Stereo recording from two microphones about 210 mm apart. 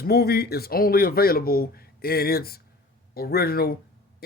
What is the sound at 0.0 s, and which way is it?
Speech, 50° left (ahead or behind).